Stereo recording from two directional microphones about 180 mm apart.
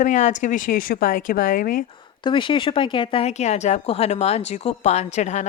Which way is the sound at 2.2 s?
25° left (ahead or behind).